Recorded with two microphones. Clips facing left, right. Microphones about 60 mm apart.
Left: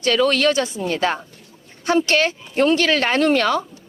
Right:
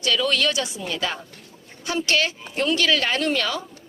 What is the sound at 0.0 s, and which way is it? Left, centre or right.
Speech, left.